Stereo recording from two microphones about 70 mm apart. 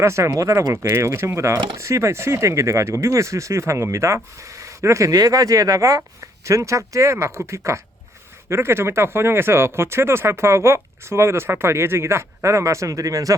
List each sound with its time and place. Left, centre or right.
0.0 s speech: right